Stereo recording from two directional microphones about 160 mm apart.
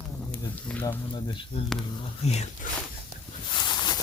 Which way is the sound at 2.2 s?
40° left (ahead or behind).